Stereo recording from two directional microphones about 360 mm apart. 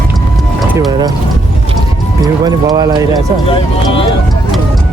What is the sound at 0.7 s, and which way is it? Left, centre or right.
Speech, centre.